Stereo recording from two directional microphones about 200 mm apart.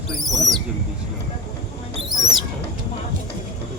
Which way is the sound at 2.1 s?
20° left (ahead or behind).